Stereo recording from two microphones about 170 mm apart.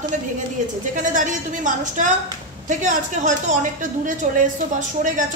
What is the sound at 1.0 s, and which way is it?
A woman's voice, 50° right (ahead or behind).